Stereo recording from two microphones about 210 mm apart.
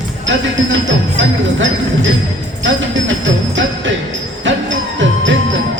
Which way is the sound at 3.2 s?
60° right (ahead or behind).